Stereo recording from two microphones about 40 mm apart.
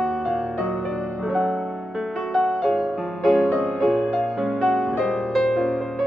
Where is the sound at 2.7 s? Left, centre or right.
Centre.